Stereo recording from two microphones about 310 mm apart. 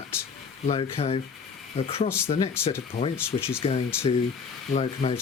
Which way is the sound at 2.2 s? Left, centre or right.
Centre.